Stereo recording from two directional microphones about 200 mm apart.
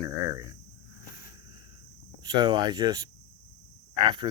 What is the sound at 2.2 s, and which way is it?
Speech, 20° right (ahead or behind).